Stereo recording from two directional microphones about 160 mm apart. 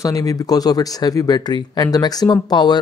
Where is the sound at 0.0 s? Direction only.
20° left (ahead or behind).